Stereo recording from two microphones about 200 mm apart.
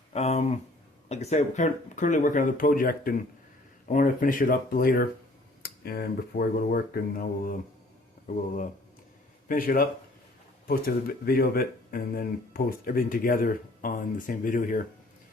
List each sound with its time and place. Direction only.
0.1 s speech: 35° left (ahead or behind)
9.5 s speech: 45° left (ahead or behind)